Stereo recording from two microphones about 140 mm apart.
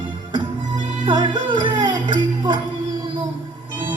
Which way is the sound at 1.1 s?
35° right (ahead or behind).